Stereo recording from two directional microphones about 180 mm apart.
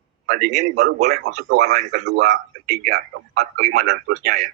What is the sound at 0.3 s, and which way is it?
Speech, 40° right (ahead or behind).